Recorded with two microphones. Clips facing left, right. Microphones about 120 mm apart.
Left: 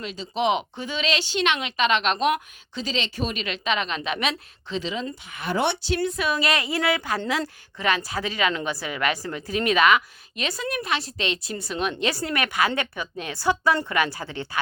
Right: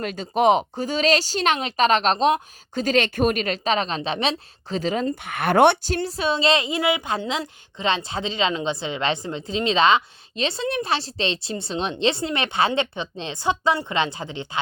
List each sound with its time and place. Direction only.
0.0 s speech: 50° right (ahead or behind); by 2.4 s 30° right (ahead or behind)
2.7 s speech: 50° right (ahead or behind); by 4.4 s 30° right (ahead or behind)
4.7 s speech: 45° right (ahead or behind)
6.0 s a woman's voice: 30° right (ahead or behind)